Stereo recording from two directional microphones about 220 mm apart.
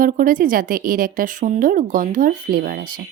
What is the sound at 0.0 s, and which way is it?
Speech, 40° right (ahead or behind).